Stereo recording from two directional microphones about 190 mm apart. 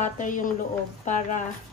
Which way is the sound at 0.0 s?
45° left (ahead or behind).